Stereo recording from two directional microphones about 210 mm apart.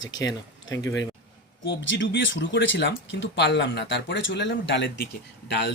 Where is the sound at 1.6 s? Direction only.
60° left (ahead or behind).